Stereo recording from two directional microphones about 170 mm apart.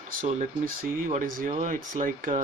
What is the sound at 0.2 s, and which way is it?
Speech, 45° right (ahead or behind).